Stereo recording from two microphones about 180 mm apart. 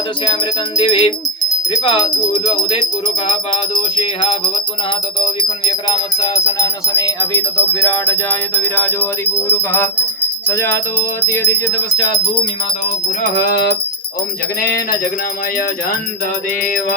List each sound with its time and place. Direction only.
0.8 s music: 30° left (ahead or behind)
4.0 s music: 25° left (ahead or behind)
13.2 s music: 60° left (ahead or behind)